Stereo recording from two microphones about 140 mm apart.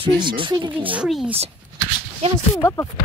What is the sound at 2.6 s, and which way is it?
Speech, 20° left (ahead or behind).